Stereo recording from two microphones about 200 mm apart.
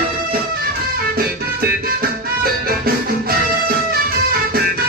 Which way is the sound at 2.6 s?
50° right (ahead or behind).